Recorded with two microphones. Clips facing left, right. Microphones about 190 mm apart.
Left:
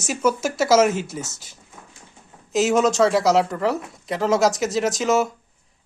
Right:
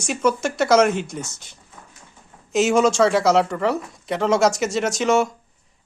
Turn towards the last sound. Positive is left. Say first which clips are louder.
# right 1 dB
turn(degrees=0)  # may be behind; listen again after turning